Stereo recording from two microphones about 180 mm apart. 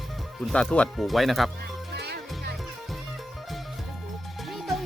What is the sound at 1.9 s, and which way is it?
Music, 60° right (ahead or behind).